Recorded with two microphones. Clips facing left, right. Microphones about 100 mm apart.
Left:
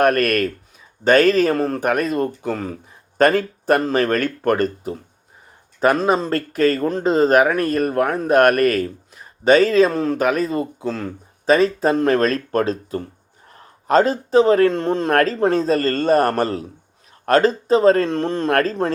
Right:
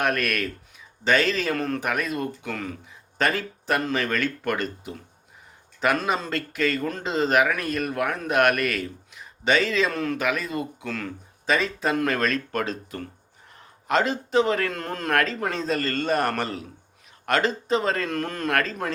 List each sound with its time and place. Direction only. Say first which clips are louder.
0.0 s speech: left 9 dB; 45° left (ahead or behind)